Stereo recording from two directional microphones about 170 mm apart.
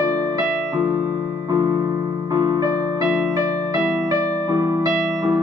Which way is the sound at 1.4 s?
20° right (ahead or behind).